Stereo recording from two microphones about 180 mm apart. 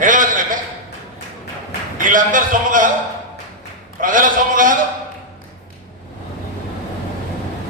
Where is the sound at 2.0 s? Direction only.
45° right (ahead or behind).